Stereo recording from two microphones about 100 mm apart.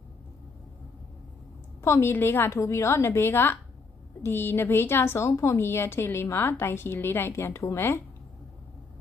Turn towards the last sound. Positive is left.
turn(degrees=25)  # may be behind; listen again after turning